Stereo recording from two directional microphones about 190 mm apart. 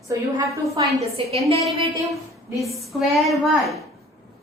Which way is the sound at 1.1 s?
30° right (ahead or behind).